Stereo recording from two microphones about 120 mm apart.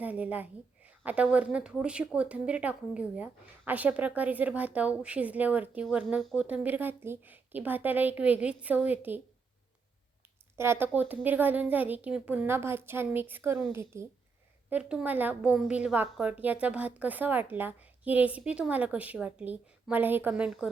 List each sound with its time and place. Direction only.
0.0 s a sound: 10° right (ahead or behind)
1.0 s speech: 10° right (ahead or behind)
10.6 s speech: 20° right (ahead or behind)
14.7 s speech: 10° right (ahead or behind)